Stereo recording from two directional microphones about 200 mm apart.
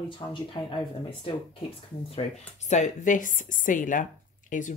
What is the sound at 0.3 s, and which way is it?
Speech, 25° left (ahead or behind).